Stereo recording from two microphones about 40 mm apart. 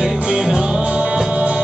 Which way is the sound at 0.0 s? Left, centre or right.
Centre.